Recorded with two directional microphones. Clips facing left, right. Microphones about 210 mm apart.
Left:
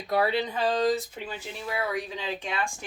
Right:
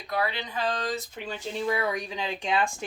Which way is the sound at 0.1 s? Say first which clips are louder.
Left 5 dB; 35° left (ahead or behind).